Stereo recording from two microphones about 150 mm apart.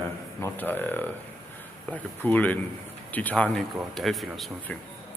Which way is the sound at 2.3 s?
10° left (ahead or behind).